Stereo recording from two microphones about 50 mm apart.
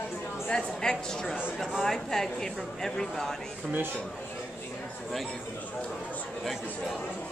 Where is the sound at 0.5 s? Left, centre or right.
Centre.